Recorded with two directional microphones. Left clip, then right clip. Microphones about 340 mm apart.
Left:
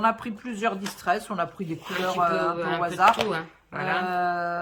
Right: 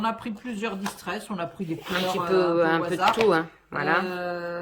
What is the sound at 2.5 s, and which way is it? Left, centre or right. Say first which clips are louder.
Speech: right 6 dB; centre.